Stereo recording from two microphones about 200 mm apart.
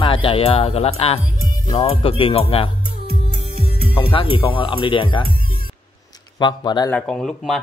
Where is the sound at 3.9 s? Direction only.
25° left (ahead or behind).